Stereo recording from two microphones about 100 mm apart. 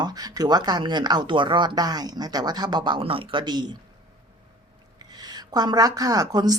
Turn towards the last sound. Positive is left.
turn(degrees=-40)  # may be behind; listen again after turning